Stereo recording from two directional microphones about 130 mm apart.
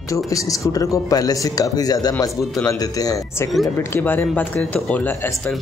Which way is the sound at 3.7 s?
15° left (ahead or behind).